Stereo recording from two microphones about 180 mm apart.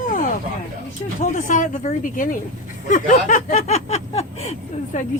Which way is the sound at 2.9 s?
45° left (ahead or behind).